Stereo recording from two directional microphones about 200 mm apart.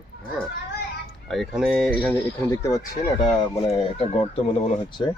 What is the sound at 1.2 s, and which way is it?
Speech, centre (ahead or behind).